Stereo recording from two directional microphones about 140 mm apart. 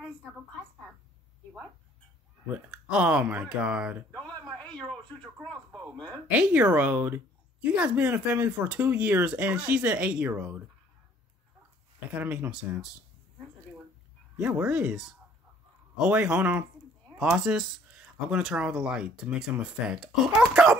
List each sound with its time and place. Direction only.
2.5 s speech: 10° right (ahead or behind)
4.1 s speech: 5° left (ahead or behind)
6.3 s speech: 10° right (ahead or behind)
12.1 s speech: 10° right (ahead or behind)
14.4 s speech: 10° right (ahead or behind)